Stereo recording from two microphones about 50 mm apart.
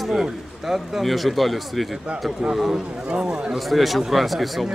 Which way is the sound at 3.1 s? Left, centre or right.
Centre.